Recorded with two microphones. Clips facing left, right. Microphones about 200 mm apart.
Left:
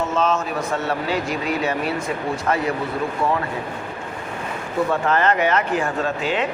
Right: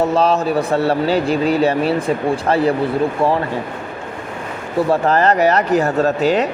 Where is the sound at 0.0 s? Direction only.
35° right (ahead or behind).